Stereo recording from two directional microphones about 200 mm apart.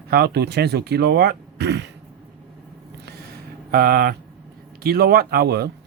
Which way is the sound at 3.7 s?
50° right (ahead or behind).